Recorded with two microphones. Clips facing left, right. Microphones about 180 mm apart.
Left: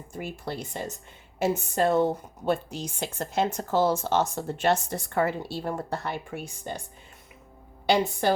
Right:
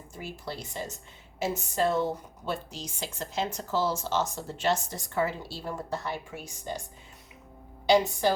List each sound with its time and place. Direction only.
0.2 s a woman's voice: 55° left (ahead or behind)
8.2 s a woman's voice: 60° left (ahead or behind)